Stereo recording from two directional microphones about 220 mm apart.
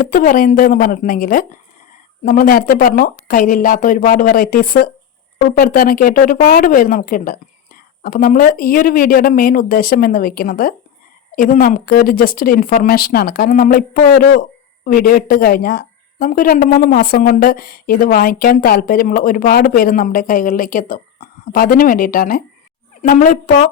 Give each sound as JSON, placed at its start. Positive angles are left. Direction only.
{"t": 0.0, "sound": "speech", "side_deg": 40}